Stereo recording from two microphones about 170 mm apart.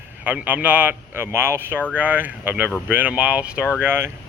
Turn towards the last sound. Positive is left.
turn(degrees=-10)  # may be behind; listen again after turning